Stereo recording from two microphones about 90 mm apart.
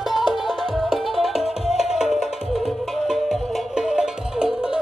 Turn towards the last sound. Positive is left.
turn(degrees=-10)  # may be behind; listen again after turning